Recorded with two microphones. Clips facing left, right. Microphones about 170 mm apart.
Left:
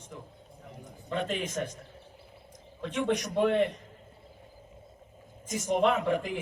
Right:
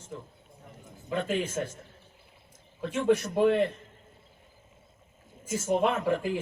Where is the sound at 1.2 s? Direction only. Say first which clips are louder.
Right 3 dB; 15° left (ahead or behind).